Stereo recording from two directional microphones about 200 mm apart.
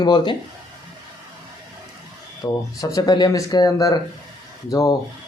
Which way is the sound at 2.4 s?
10° left (ahead or behind).